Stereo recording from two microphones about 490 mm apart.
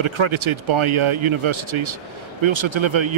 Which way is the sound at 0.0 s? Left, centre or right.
Right.